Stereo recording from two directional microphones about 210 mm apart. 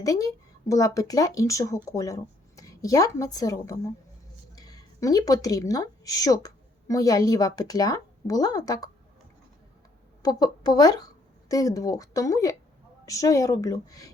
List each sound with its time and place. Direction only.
0.0 s a woman's voice: 15° left (ahead or behind)
10.2 s speech: 20° left (ahead or behind)